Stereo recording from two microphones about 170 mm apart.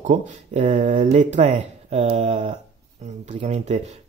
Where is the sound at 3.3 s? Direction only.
45° right (ahead or behind).